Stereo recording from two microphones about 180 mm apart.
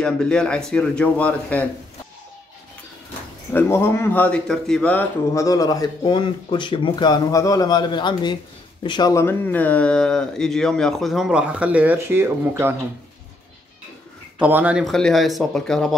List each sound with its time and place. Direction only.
0.0 s speech: 5° left (ahead or behind)
3.5 s speech: 15° left (ahead or behind); by 12.7 s 10° right (ahead or behind)
14.4 s speech: 5° right (ahead or behind)